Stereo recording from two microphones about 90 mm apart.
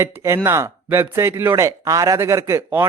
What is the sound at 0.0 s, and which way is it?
A man's voice, 30° right (ahead or behind).